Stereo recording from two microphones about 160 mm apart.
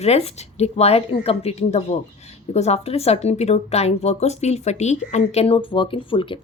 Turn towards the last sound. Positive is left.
turn(degrees=30)  # may be behind; listen again after turning